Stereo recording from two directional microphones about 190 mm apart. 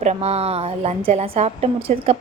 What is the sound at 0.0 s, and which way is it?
A woman's voice, 35° right (ahead or behind).